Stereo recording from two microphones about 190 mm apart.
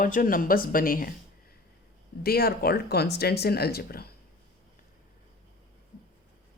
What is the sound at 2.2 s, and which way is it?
Speech, 55° left (ahead or behind).